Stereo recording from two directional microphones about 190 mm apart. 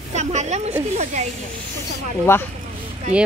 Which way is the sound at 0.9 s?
35° right (ahead or behind).